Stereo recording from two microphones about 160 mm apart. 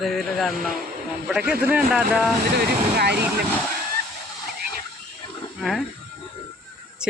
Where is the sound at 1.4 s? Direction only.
75° right (ahead or behind).